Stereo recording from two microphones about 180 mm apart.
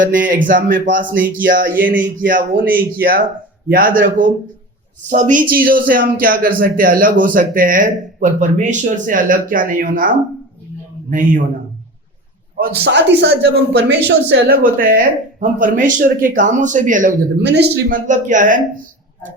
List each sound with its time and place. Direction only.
0.0 s speech: 50° right (ahead or behind)
11.1 s speech: 50° right (ahead or behind)
12.5 s speech: 55° right (ahead or behind)
17.4 s speech: 65° right (ahead or behind)
17.9 s speech: 45° right (ahead or behind)